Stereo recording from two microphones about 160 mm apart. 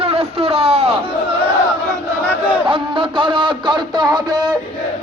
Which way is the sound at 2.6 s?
30° right (ahead or behind).